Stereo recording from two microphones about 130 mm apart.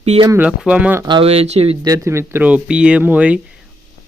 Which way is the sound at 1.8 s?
25° right (ahead or behind).